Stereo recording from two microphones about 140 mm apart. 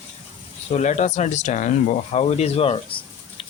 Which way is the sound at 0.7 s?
55° left (ahead or behind).